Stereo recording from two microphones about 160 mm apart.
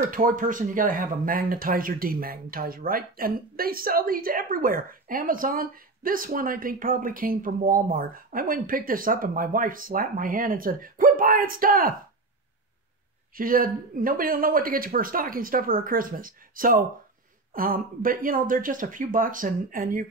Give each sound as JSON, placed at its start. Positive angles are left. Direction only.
{"t": 0.1, "sound": "speech", "side_deg": -60}
{"t": 13.4, "sound": "speech", "side_deg": -60}